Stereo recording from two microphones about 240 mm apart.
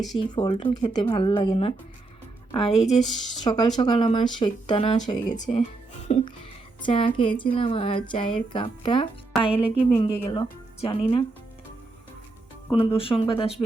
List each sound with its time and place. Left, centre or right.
0.2 s a woman's voice: left
12.7 s a woman's voice: left